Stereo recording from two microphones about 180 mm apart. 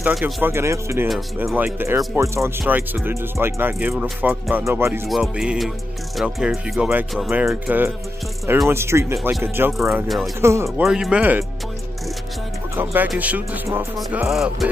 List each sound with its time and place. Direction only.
0.0 s speech: 10° right (ahead or behind)
5.0 s speech: centre (ahead or behind)
9.8 s speech: centre (ahead or behind)
10.4 s speech: 15° right (ahead or behind)
10.8 s speech: 5° right (ahead or behind)
12.7 s speech: 10° right (ahead or behind)